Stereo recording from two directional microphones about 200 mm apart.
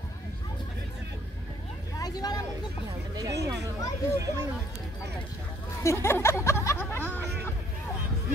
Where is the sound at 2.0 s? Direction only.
20° left (ahead or behind).